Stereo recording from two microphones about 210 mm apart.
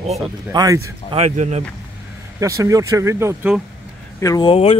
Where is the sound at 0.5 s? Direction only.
15° right (ahead or behind).